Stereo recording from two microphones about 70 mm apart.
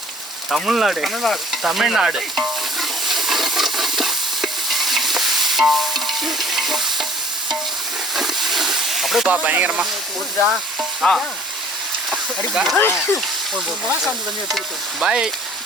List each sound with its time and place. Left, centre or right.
0.5 s stir: centre
8.1 s hiss: centre
9.2 s speech: right
11.0 s stir: centre
12.5 s stir: centre
15.0 s frying: centre